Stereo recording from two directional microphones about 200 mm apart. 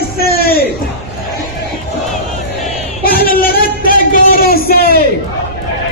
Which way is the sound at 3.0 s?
45° left (ahead or behind).